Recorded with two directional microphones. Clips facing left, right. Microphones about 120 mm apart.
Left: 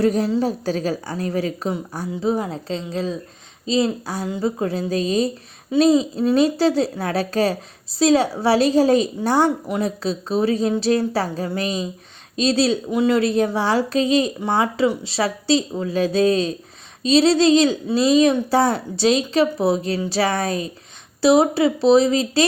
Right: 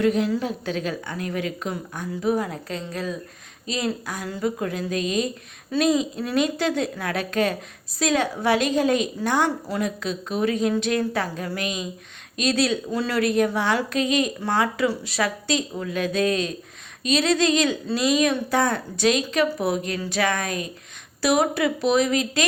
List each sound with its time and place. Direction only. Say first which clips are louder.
0.0 s a woman's voice: left 3 dB; 35° left (ahead or behind)
12.9 s a woman's voice: left 5 dB; 20° left (ahead or behind)